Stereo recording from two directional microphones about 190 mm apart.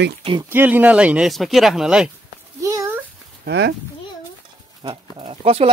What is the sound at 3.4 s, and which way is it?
Speech, 65° right (ahead or behind).